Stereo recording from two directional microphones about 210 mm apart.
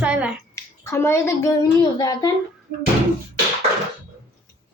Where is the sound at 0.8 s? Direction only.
10° left (ahead or behind).